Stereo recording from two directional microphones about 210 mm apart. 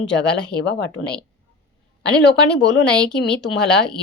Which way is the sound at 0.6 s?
55° left (ahead or behind).